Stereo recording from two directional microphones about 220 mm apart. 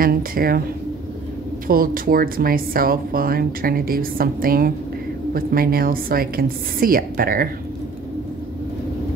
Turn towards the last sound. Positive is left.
turn(degrees=-40)  # may be behind; listen again after turning